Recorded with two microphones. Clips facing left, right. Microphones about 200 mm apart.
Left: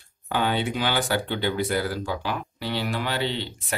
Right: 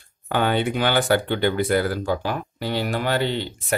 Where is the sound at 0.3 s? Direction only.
55° right (ahead or behind).